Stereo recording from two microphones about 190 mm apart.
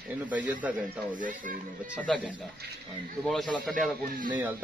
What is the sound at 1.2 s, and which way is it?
Speech, 45° right (ahead or behind).